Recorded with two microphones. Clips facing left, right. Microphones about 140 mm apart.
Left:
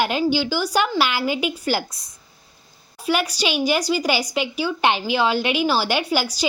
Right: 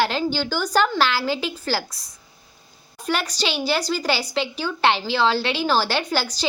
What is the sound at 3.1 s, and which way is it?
A woman's voice, 10° left (ahead or behind).